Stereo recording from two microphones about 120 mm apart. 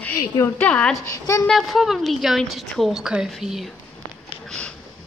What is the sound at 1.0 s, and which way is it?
Speech, 25° left (ahead or behind).